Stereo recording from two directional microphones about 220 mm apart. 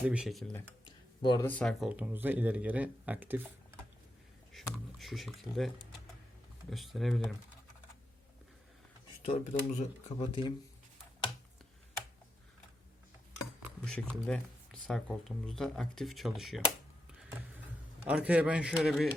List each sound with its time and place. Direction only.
0.0 s speech: 5° right (ahead or behind)
0.9 s a sound: 20° left (ahead or behind)
1.5 s speech: 5° left (ahead or behind)
4.5 s a sound: centre (ahead or behind)
4.9 s speech: centre (ahead or behind)
9.2 s speech: 30° left (ahead or behind)
13.8 s speech: 5° left (ahead or behind)
18.0 s speech: 5° right (ahead or behind)